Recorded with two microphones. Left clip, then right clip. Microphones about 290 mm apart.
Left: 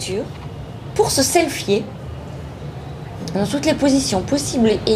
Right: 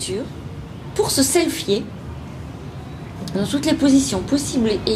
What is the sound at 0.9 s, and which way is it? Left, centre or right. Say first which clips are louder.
Speech: left 2 dB; centre.